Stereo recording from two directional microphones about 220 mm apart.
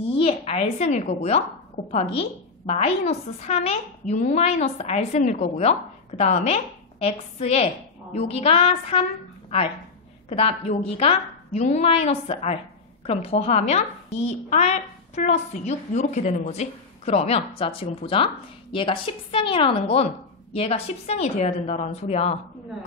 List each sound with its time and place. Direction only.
0.0 s a woman's voice: 25° left (ahead or behind)
10.3 s a woman's voice: 25° left (ahead or behind)